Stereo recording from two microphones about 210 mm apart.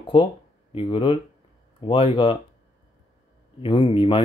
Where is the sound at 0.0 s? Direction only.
25° left (ahead or behind).